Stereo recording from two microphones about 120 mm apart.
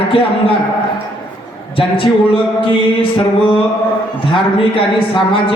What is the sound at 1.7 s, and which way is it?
Speech, 50° left (ahead or behind).